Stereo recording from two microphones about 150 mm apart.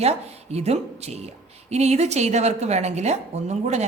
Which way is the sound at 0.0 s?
45° right (ahead or behind).